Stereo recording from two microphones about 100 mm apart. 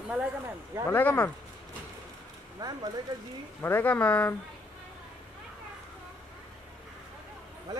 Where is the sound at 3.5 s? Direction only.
20° left (ahead or behind).